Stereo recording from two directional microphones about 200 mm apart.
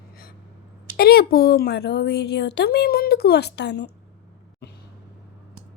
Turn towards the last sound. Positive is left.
turn(degrees=55)  # may be behind; listen again after turning